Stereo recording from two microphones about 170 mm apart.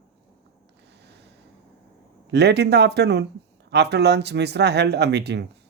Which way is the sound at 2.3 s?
80° right.